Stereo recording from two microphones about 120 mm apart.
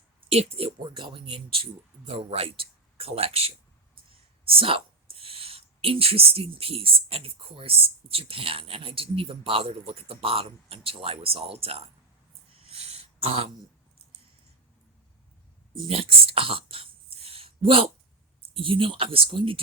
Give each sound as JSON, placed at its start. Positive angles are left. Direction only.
{"t": 0.5, "sound": "speech", "side_deg": -45}
{"t": 4.5, "sound": "speech", "side_deg": -50}
{"t": 12.6, "sound": "a sound", "side_deg": -55}
{"t": 15.9, "sound": "throat clearing", "side_deg": -50}
{"t": 18.5, "sound": "speech", "side_deg": -45}